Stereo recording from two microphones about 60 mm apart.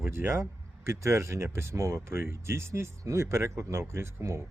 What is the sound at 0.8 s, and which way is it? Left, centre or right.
Speech, right.